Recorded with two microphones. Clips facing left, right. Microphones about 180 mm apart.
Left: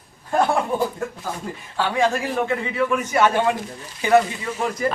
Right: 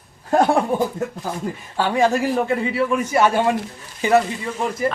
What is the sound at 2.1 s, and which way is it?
Speech, 40° right (ahead or behind).